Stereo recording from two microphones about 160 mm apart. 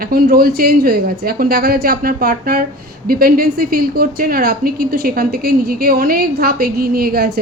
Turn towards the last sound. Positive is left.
turn(degrees=-70)  # may be behind; listen again after turning